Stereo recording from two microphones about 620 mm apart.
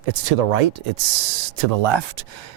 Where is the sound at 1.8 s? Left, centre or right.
Right.